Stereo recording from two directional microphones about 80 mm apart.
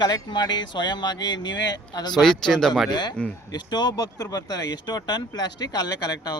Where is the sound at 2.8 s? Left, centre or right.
Left.